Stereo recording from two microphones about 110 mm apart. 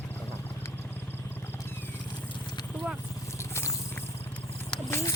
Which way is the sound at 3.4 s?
25° left (ahead or behind).